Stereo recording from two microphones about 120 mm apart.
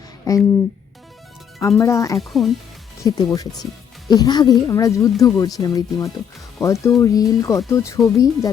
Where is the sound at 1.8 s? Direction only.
25° left (ahead or behind).